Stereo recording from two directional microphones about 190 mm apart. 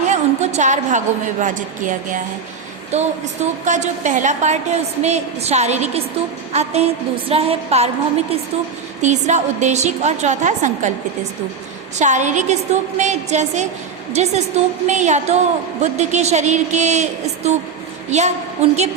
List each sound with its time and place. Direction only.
0.1 s a woman's voice: 40° right (ahead or behind)
9.0 s a woman's voice: 40° right (ahead or behind)
11.9 s a woman's voice: 40° right (ahead or behind)